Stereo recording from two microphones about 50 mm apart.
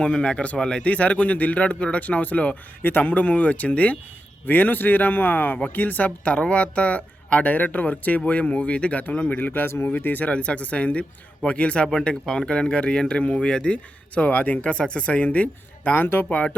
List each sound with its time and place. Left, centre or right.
0.0 s speech: centre
9.4 s speech: left
12.0 s speech: centre
14.2 s speech: left
14.6 s speech: left